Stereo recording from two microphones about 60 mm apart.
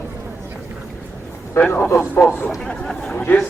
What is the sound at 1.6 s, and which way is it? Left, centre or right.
Speech, left.